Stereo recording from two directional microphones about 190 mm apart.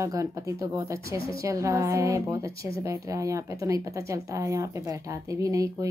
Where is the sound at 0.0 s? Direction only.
15° right (ahead or behind).